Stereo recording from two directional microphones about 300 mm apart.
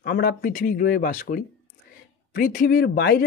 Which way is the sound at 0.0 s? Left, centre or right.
Left.